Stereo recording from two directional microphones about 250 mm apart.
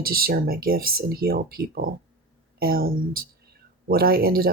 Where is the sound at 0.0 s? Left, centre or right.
Right.